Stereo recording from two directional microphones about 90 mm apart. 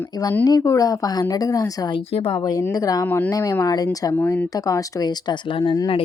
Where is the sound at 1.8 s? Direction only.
80° left.